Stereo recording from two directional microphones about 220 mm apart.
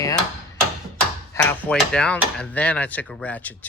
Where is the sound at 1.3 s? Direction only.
10° left (ahead or behind).